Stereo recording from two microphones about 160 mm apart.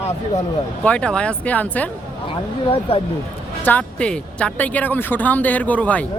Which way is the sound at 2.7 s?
35° left (ahead or behind).